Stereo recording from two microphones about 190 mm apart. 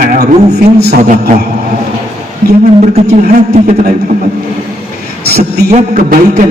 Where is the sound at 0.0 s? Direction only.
55° right (ahead or behind).